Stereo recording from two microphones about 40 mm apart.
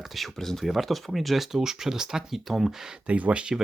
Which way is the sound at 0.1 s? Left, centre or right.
Centre.